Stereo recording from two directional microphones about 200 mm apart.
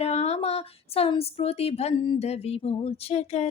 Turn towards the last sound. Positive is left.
turn(degrees=35)  # may be behind; listen again after turning